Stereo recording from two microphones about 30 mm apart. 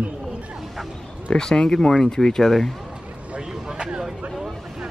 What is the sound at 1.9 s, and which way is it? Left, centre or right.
Speech, centre.